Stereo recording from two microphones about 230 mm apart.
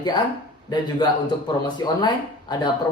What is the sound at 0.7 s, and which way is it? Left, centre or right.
Speech, centre.